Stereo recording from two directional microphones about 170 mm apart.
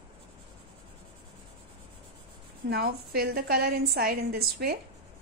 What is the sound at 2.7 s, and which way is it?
A woman's voice, 65° right (ahead or behind).